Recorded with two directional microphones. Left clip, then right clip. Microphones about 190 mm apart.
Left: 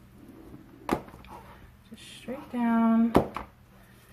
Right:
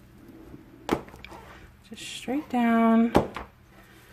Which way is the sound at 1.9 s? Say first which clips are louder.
Right 8 dB; 55° right (ahead or behind).